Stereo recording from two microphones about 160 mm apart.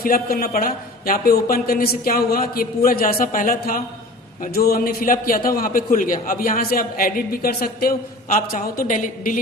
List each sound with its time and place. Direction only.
0.0 s a man's voice: 70° left (ahead or behind)